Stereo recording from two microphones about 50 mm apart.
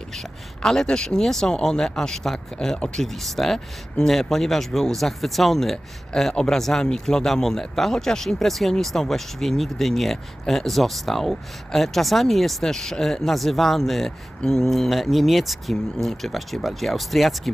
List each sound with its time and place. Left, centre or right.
0.1 s speech: centre